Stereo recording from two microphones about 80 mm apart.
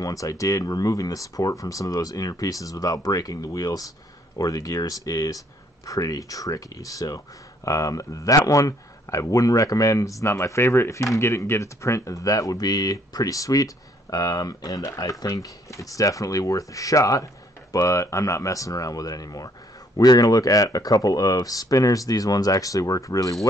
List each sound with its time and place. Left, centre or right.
0.0 s speech: left